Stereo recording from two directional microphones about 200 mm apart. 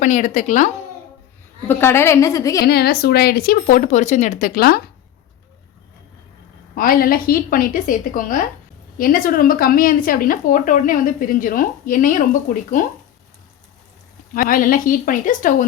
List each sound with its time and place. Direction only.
0.0 s a woman's voice: 40° left (ahead or behind)
1.6 s a woman's voice: 10° left (ahead or behind)
2.6 s speech: 50° left (ahead or behind)
6.7 s speech: 45° left (ahead or behind)
14.3 s speech: 45° left (ahead or behind)